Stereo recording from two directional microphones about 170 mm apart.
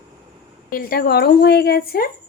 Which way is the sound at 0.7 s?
60° left (ahead or behind).